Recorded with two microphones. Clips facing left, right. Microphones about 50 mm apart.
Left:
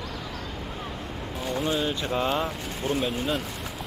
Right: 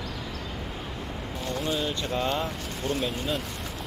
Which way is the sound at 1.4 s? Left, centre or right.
Centre.